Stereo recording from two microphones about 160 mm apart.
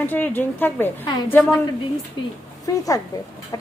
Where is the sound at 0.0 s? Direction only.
10° left (ahead or behind).